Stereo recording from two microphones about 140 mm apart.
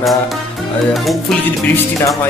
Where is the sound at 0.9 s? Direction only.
Centre (ahead or behind).